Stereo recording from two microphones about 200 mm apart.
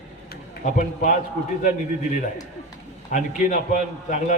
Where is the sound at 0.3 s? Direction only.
45° left (ahead or behind).